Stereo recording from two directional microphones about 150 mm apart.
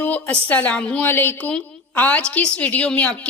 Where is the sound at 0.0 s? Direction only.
10° left (ahead or behind).